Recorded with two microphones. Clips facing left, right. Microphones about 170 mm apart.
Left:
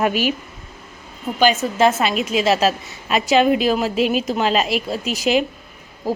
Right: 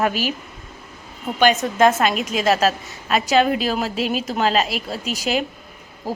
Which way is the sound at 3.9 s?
40° right (ahead or behind).